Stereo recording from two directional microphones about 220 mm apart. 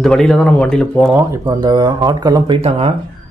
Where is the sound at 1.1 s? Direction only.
15° right (ahead or behind).